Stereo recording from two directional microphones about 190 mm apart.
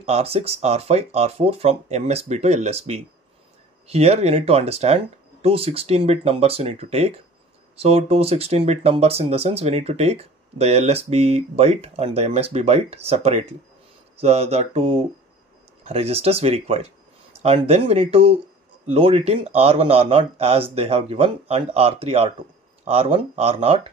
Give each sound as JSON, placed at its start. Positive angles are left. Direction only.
{"t": 0.0, "sound": "speech", "side_deg": -30}